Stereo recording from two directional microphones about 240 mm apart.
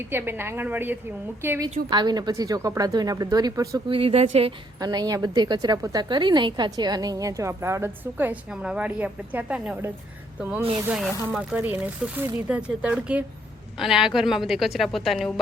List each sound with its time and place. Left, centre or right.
0.1 s a woman's voice: centre